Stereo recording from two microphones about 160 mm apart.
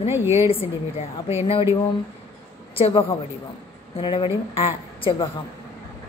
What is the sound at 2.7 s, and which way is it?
A woman's voice, 35° left (ahead or behind).